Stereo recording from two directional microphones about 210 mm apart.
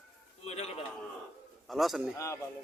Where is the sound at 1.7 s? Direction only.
Centre (ahead or behind).